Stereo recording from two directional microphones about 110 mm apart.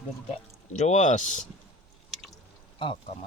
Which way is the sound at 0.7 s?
90° left.